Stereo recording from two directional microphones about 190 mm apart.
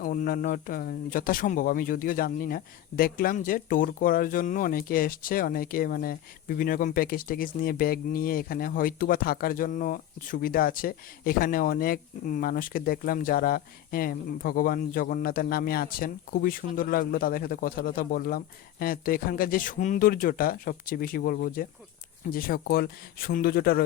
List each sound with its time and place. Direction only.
0.0 s speech: 45° left (ahead or behind)